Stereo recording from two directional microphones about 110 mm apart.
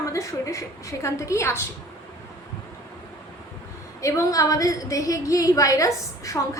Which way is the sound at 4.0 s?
30° left (ahead or behind).